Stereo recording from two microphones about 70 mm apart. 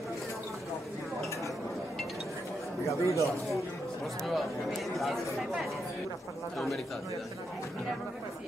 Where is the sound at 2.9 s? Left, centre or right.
Left.